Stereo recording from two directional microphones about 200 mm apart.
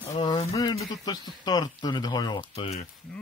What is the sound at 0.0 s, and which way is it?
Speech, 20° left (ahead or behind).